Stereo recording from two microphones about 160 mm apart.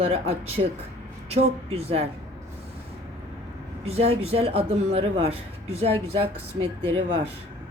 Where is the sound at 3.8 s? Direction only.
40° right (ahead or behind).